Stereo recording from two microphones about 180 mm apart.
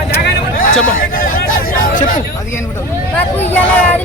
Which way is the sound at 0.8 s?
50° left (ahead or behind).